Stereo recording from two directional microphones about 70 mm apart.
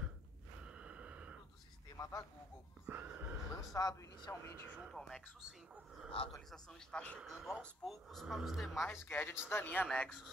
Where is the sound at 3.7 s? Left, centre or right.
Left.